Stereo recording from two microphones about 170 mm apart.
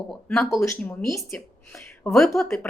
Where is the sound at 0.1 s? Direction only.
5° left (ahead or behind).